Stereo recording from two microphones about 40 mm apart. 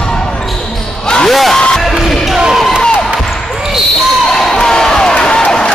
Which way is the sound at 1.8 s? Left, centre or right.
Centre.